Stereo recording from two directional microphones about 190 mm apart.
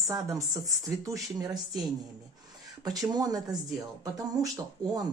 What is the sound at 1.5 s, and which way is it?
Speech, centre (ahead or behind).